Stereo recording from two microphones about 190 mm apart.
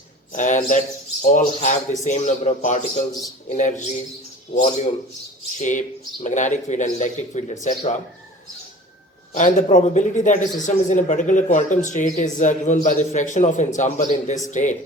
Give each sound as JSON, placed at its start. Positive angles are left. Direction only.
{"t": 0.3, "sound": "speech", "side_deg": 40}
{"t": 9.3, "sound": "speech", "side_deg": 40}